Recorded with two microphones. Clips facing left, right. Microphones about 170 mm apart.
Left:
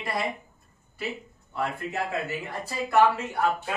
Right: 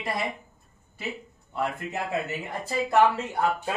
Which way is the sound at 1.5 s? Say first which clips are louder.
Even; 20° right (ahead or behind).